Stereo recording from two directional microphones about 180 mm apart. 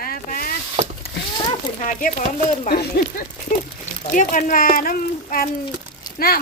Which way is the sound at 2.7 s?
55° left (ahead or behind).